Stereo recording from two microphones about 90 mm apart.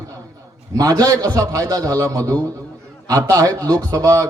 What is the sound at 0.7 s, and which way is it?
A man's voice, 45° right (ahead or behind).